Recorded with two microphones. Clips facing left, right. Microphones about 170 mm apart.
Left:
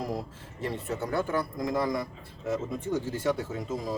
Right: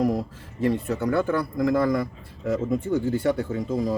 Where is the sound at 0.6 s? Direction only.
65° right (ahead or behind).